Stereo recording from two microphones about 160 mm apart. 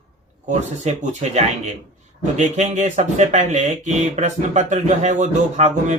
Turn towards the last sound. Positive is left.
turn(degrees=-45)  # may be behind; listen again after turning